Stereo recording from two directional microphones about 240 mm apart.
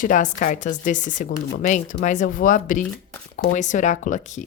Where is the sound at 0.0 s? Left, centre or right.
Left.